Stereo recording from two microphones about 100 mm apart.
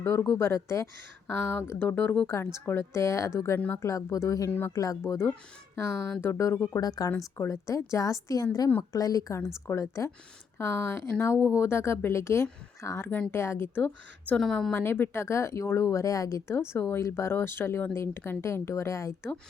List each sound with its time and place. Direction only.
0.0 s speech: 30° left (ahead or behind)
1.3 s speech: 15° left (ahead or behind)
1.6 s a woman's voice: 25° left (ahead or behind)
6.7 s a woman's voice: 40° left (ahead or behind); by 14.3 s 20° left (ahead or behind)
14.3 s a woman's voice: 5° left (ahead or behind)
14.7 s speech: 20° left (ahead or behind)